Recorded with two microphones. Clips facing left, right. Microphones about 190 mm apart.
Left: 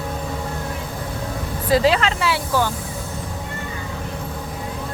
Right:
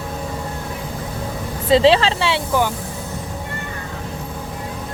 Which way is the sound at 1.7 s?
25° right (ahead or behind).